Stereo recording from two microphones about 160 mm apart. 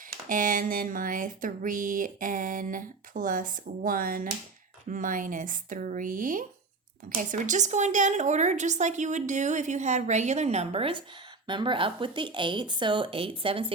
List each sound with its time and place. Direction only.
0.3 s a woman's voice: 55° right (ahead or behind); by 13.7 s 35° right (ahead or behind)